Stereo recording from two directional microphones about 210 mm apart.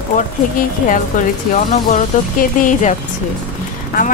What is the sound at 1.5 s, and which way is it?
Speech, 35° left (ahead or behind).